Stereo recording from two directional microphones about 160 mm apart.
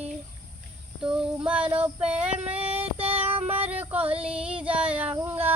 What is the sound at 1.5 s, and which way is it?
Child singing, 10° right (ahead or behind).